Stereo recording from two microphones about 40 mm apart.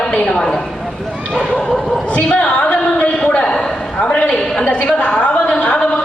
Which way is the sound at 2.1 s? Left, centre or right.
Left.